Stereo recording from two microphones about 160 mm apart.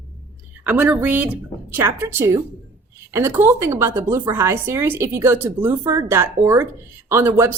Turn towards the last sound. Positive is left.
turn(degrees=-15)  # may be behind; listen again after turning